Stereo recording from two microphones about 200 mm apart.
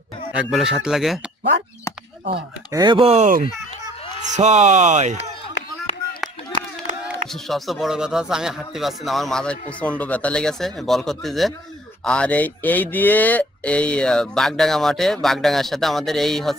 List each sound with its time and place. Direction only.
0.3 s speech: 5° right (ahead or behind)
2.2 s speech: 25° right (ahead or behind)
7.4 s speech: centre (ahead or behind)